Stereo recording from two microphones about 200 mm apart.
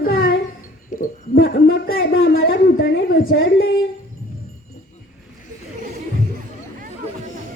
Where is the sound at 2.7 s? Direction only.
45° left (ahead or behind).